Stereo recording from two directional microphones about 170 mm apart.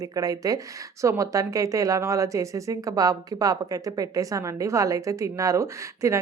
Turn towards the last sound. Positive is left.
turn(degrees=-15)  # may be behind; listen again after turning